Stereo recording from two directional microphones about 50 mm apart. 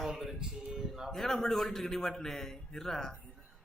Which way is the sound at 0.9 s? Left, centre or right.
Centre.